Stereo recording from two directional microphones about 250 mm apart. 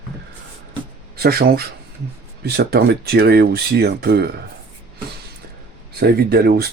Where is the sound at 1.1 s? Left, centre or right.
Right.